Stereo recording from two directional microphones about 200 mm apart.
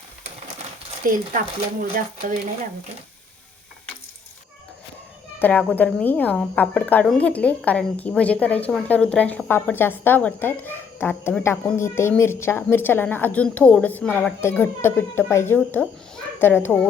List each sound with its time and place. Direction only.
1.0 s speech: 45° right (ahead or behind)
5.4 s speech: 5° left (ahead or behind)